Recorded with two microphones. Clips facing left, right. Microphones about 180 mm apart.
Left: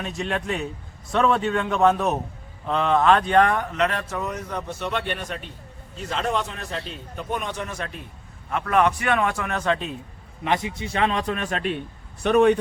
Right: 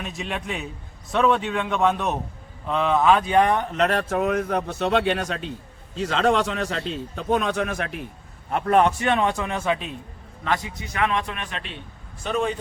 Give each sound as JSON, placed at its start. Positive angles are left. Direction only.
{"t": 0.0, "sound": "speech", "side_deg": 0}
{"t": 3.7, "sound": "speech", "side_deg": -40}
{"t": 4.2, "sound": "speech", "side_deg": -60}
{"t": 8.4, "sound": "a man's voice", "side_deg": -35}
{"t": 10.4, "sound": "a man's voice", "side_deg": 25}
{"t": 12.2, "sound": "speech", "side_deg": 65}